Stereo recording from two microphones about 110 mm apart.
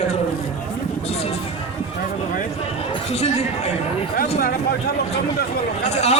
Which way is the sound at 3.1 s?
75° left (ahead or behind).